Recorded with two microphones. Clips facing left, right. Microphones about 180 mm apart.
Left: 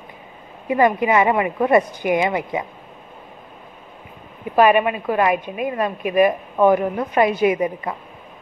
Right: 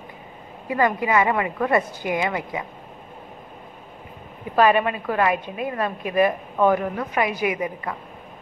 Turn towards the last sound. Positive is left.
turn(degrees=25)  # may be behind; listen again after turning